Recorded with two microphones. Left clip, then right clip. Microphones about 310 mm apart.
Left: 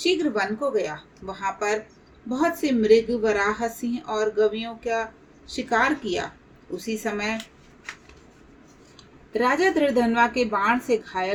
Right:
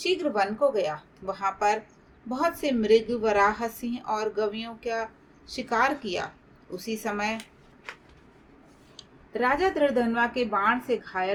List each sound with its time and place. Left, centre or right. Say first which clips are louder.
0.0 s a woman's voice: left 2 dB; right
9.3 s a woman's voice: left 3 dB; centre